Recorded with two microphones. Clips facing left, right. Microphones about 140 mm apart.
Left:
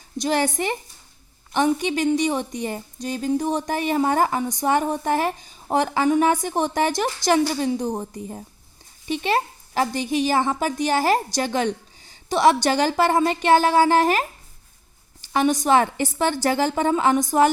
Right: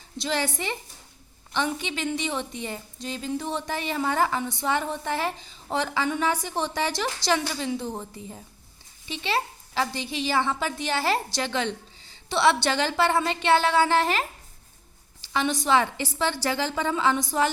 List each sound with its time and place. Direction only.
0.2 s a woman's voice: 45° left (ahead or behind)